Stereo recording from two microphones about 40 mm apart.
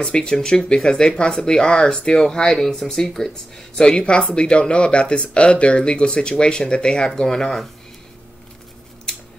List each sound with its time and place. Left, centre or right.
0.0 s speech: left